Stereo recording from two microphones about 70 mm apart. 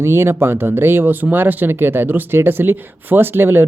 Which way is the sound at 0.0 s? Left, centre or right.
Right.